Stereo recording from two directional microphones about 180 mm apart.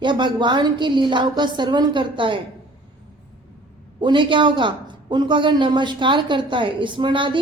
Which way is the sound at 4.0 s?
25° right (ahead or behind).